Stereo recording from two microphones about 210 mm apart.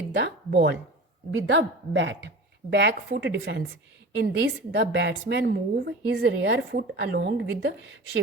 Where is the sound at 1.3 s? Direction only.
65° right (ahead or behind).